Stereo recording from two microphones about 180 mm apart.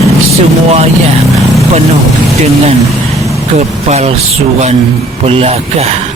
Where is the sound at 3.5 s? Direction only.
40° right (ahead or behind).